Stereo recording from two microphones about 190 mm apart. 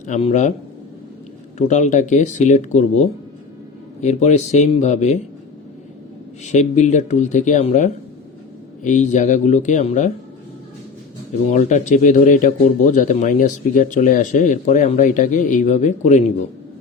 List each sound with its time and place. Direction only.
0.0 s speech: 35° left (ahead or behind)
1.5 s speech: 40° left (ahead or behind)
6.4 s speech: 35° left (ahead or behind)
11.4 s speech: 40° left (ahead or behind)